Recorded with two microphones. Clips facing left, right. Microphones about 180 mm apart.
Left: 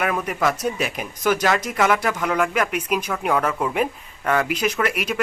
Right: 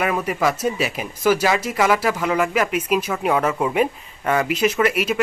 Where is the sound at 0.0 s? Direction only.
5° right (ahead or behind).